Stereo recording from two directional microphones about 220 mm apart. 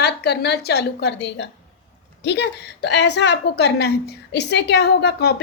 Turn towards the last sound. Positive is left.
turn(degrees=45)  # may be behind; listen again after turning